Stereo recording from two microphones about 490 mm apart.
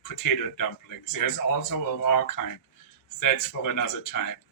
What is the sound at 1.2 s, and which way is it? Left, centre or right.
Speech, left.